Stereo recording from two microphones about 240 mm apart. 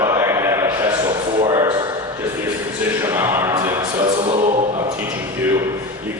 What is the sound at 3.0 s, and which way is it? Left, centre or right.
Music, centre.